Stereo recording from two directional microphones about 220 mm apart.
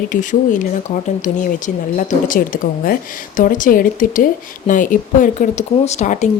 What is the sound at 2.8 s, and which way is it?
Speech, 40° left (ahead or behind).